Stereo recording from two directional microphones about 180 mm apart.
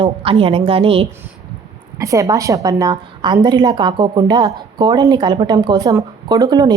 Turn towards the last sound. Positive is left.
turn(degrees=-25)  # may be behind; listen again after turning